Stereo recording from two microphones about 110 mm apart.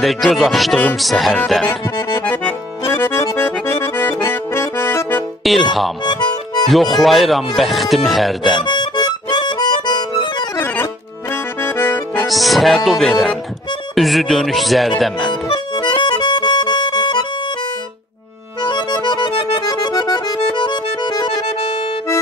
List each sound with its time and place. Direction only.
0.0 s speech: centre (ahead or behind)
1.7 s accordion: 25° left (ahead or behind)
5.4 s speech: centre (ahead or behind)
6.0 s harmonica: 40° left (ahead or behind)
6.7 s speech: centre (ahead or behind)
8.6 s music: 45° left (ahead or behind)
11.6 s accordion: 20° left (ahead or behind)
12.3 s speech: centre (ahead or behind)
15.4 s accordion: 45° left (ahead or behind)
18.6 s accordion: 40° left (ahead or behind)
20.5 s music: 45° left (ahead or behind)
21.5 s accordion: 60° left (ahead or behind)